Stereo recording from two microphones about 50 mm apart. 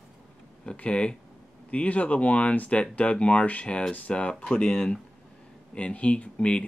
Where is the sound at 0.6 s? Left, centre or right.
Left.